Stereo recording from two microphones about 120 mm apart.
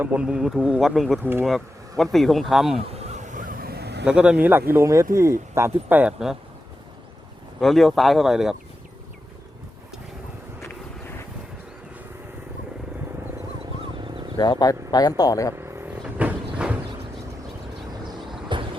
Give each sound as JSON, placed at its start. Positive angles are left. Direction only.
{"t": 0.0, "sound": "speech", "side_deg": -10}
{"t": 1.2, "sound": "speech", "side_deg": -20}
{"t": 1.5, "sound": "speech", "side_deg": 0}
{"t": 2.9, "sound": "a sound", "side_deg": -70}
{"t": 4.0, "sound": "speech", "side_deg": -10}
{"t": 7.6, "sound": "speech", "side_deg": 0}
{"t": 13.8, "sound": "wild animals", "side_deg": -45}
{"t": 14.3, "sound": "speech", "side_deg": 35}
{"t": 15.5, "sound": "vehicle", "side_deg": -20}
{"t": 18.5, "sound": "a sound", "side_deg": -40}